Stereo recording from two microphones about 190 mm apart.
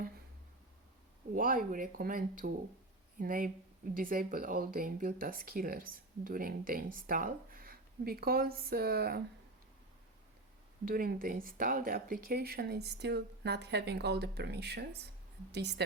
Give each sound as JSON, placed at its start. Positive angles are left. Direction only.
{"t": 1.4, "sound": "speech", "side_deg": -45}
{"t": 10.8, "sound": "speech", "side_deg": -50}